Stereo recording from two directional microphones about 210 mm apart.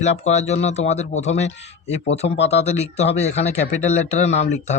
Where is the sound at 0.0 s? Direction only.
30° left (ahead or behind).